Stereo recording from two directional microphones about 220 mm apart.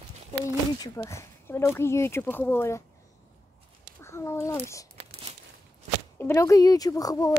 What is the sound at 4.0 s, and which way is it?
Speech, 10° left (ahead or behind).